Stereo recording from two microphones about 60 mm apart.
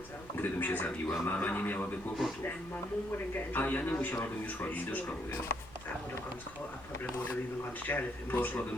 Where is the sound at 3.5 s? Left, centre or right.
Left.